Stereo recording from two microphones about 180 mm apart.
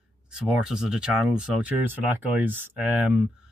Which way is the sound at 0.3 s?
5° right (ahead or behind).